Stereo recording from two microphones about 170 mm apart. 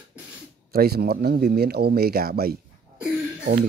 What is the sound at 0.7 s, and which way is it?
Speech, 65° right (ahead or behind).